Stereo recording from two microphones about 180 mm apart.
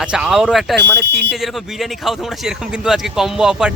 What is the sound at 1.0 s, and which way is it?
Speech, 70° right (ahead or behind).